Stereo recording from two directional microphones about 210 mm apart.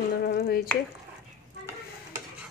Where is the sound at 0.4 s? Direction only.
45° left (ahead or behind).